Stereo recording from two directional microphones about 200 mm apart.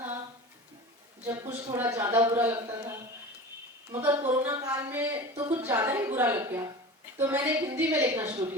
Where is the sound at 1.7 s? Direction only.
10° right (ahead or behind).